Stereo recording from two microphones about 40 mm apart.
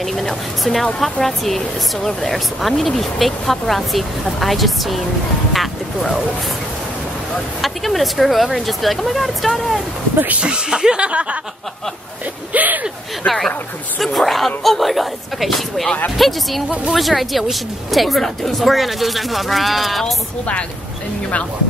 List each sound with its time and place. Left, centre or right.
0.0 s a woman's voice: centre
7.6 s a woman's voice: centre
10.1 s speech: right
10.4 s speech: right
12.5 s gasp: right
13.9 s a woman's voice: centre